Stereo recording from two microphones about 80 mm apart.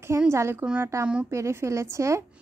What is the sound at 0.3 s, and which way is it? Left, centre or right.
A woman's voice, right.